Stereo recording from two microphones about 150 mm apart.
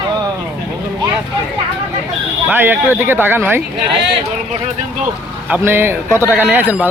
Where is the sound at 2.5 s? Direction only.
15° right (ahead or behind).